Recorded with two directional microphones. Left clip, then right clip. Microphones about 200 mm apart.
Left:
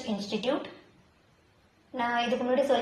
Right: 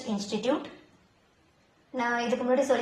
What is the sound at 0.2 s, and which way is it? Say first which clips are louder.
Speech: right 2 dB; 30° right (ahead or behind).